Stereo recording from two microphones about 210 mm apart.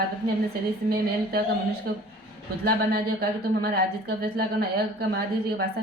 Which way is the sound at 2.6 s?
50° right (ahead or behind).